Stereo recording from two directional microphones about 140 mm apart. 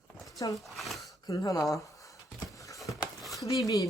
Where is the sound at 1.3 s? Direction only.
25° left (ahead or behind).